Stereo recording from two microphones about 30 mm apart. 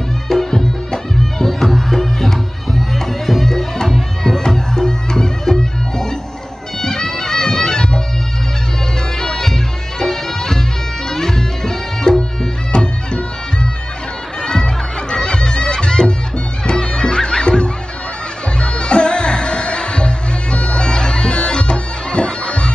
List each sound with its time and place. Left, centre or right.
0.3 s music: centre
6.8 s bagpipes: centre
9.2 s music: centre
14.4 s music: left
20.5 s bagpipes: left